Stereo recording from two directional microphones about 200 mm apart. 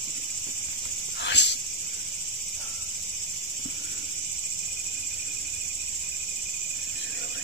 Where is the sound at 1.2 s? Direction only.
60° left (ahead or behind).